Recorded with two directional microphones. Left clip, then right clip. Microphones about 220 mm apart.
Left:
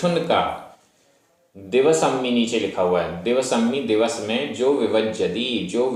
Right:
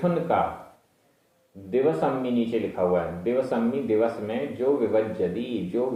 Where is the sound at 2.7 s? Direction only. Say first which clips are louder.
Left 2 dB; 20° left (ahead or behind).